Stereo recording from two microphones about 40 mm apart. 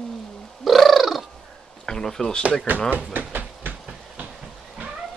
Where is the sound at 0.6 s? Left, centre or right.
Centre.